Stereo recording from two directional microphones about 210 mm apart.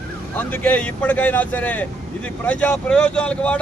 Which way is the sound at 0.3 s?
10° left (ahead or behind).